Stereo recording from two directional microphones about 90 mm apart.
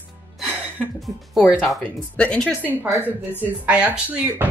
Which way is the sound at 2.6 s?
20° right (ahead or behind).